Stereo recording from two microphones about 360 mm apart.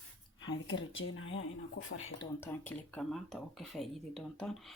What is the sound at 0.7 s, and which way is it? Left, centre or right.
Speech, left.